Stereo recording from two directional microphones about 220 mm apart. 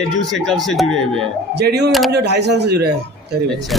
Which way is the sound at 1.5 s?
50° right (ahead or behind).